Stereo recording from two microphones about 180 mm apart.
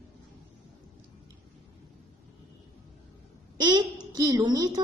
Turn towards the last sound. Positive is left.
turn(degrees=-20)  # may be behind; listen again after turning